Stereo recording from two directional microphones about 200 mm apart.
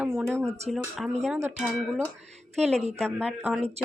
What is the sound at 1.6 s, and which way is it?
Speech, centre (ahead or behind).